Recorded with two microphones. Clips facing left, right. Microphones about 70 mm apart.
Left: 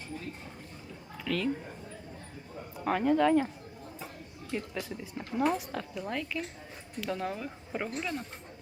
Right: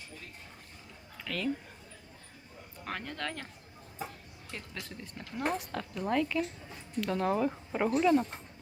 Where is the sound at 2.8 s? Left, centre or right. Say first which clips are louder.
Left 13 dB; centre.